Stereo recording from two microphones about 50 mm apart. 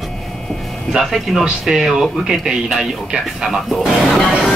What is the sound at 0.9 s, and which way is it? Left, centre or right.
Speech, centre.